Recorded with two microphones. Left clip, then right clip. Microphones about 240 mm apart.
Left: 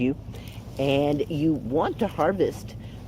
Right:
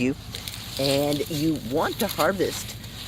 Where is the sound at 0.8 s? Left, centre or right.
Right.